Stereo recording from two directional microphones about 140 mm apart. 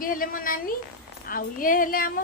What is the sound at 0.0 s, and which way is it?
A woman's voice, 90° left.